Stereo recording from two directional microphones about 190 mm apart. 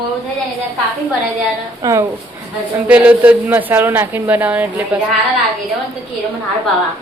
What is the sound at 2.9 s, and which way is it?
Speech, 5° right (ahead or behind).